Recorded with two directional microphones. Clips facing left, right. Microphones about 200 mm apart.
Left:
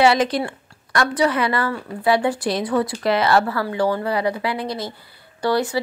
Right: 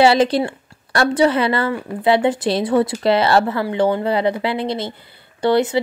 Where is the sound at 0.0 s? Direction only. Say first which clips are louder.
Right 3 dB; 30° right (ahead or behind).